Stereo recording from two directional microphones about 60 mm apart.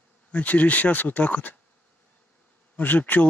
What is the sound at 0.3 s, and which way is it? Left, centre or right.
Speech, left.